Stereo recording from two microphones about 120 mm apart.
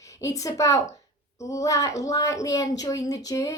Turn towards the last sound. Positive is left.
turn(degrees=30)  # may be behind; listen again after turning